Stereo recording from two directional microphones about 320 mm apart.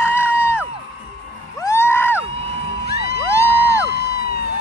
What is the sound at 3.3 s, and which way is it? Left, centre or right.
Music, centre.